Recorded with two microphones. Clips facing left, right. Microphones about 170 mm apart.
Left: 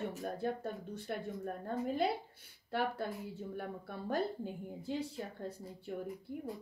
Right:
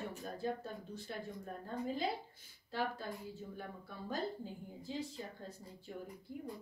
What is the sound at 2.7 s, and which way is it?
Speech, 65° left (ahead or behind).